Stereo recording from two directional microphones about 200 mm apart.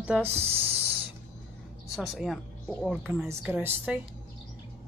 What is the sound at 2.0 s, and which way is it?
A woman's voice, centre (ahead or behind).